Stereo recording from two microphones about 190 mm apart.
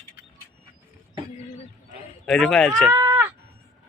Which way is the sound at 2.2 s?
5° left (ahead or behind).